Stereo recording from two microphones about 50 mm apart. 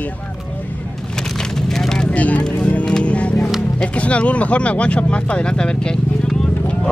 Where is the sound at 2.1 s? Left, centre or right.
Left.